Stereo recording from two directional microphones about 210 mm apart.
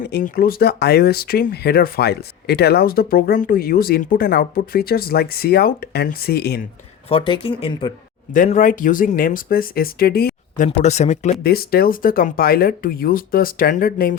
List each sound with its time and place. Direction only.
0.1 s speech: 45° left (ahead or behind)
7.1 s speech: 25° left (ahead or behind)
8.3 s speech: 40° left (ahead or behind)
10.8 s speech: 30° left (ahead or behind)
11.4 s speech: 45° left (ahead or behind)